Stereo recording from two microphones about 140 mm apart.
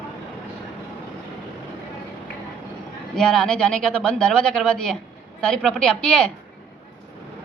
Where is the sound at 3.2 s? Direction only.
5° left (ahead or behind).